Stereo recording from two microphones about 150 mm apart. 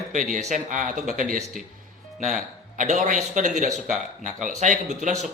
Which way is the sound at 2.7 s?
55° right (ahead or behind).